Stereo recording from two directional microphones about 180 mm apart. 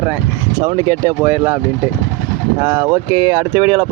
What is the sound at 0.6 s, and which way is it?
Speech, 25° right (ahead or behind).